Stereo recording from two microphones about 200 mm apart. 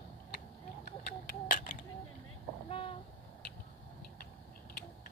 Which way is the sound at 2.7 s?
30° left (ahead or behind).